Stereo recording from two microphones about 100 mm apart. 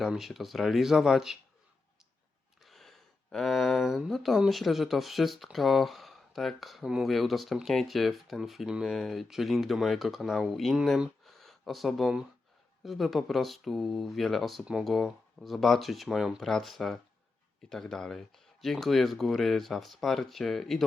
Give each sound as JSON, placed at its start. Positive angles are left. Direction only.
{"t": 0.0, "sound": "speech", "side_deg": 0}
{"t": 2.6, "sound": "a sound", "side_deg": 0}
{"t": 3.3, "sound": "speech", "side_deg": 0}